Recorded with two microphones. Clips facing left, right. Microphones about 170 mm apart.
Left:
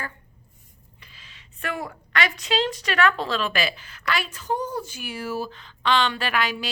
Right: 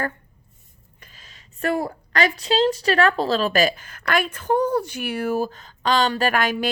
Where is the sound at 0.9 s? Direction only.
45° right (ahead or behind).